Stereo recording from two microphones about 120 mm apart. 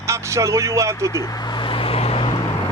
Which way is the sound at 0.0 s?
25° right (ahead or behind).